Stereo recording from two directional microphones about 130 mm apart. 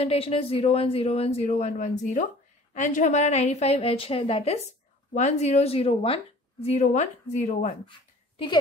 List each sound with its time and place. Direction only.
0.0 s a woman's voice: 50° left (ahead or behind)
5.1 s a woman's voice: 60° left (ahead or behind)